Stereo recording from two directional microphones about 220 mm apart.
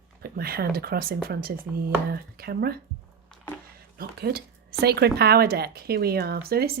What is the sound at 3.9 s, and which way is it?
Speech, 45° right (ahead or behind).